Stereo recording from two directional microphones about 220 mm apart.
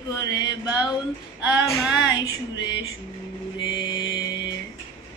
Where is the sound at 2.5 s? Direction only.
55° left (ahead or behind).